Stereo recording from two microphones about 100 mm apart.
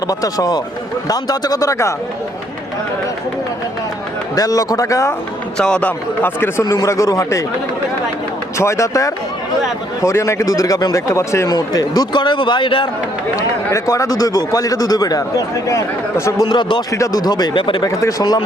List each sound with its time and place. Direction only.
0.1 s a man's voice: 40° left (ahead or behind)
4.4 s a man's voice: 35° left (ahead or behind)
5.5 s a man's voice: 10° left (ahead or behind); by 7.4 s 30° left (ahead or behind)
8.5 s a man's voice: 30° left (ahead or behind)
12.1 s speech: 50° left (ahead or behind)
13.3 s a man's voice: 30° left (ahead or behind)
16.5 s speech: 50° left (ahead or behind)
16.9 s a man's voice: 35° left (ahead or behind)
17.6 s speech: 55° left (ahead or behind)
17.8 s a man's voice: 35° left (ahead or behind)